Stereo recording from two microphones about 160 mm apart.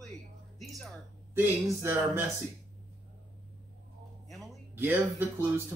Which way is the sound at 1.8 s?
15° right (ahead or behind).